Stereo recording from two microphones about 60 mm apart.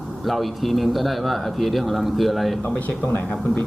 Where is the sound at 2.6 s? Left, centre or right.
Left.